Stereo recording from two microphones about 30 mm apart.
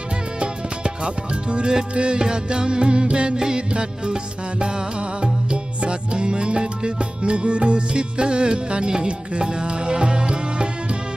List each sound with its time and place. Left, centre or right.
0.4 s music: right